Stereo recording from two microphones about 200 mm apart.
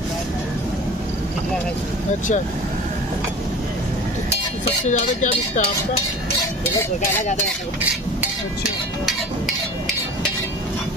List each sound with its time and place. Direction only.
4.8 s dishes: 35° left (ahead or behind)